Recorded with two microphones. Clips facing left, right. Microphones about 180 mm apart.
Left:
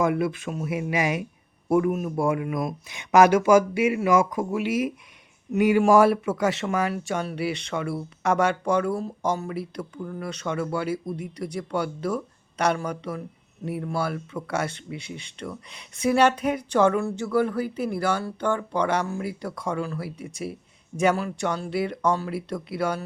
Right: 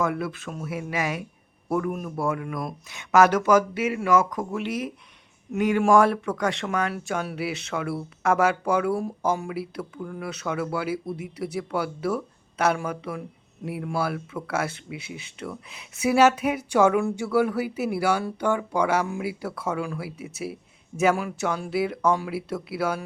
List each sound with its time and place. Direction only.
0.0 s speech: 15° left (ahead or behind); by 23.0 s 5° right (ahead or behind)